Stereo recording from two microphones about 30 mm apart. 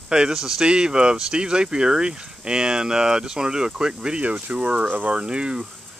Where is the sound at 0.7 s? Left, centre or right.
Right.